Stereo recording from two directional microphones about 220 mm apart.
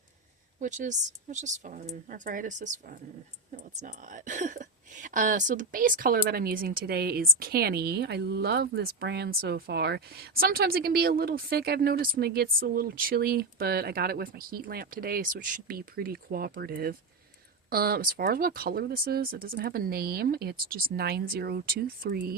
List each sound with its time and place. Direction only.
0.6 s a woman's voice: 35° right (ahead or behind)